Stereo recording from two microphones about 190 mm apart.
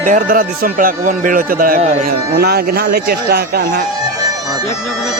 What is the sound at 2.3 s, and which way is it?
Speech, 55° right (ahead or behind).